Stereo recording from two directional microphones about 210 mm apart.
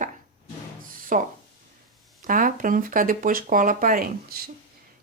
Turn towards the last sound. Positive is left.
turn(degrees=-45)  # may be behind; listen again after turning